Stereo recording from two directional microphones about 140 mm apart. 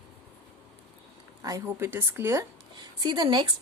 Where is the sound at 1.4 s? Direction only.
20° right (ahead or behind).